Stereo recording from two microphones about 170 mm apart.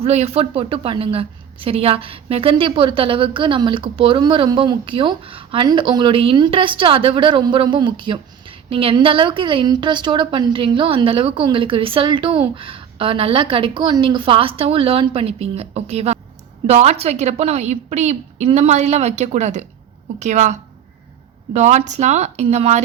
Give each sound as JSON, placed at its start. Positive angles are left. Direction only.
{"t": 0.0, "sound": "a woman's voice", "side_deg": -35}